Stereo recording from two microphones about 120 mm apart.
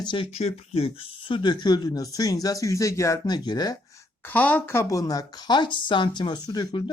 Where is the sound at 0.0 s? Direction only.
40° left (ahead or behind).